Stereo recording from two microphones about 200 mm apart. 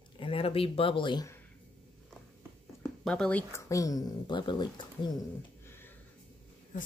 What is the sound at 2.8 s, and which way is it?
Speech, 5° left (ahead or behind).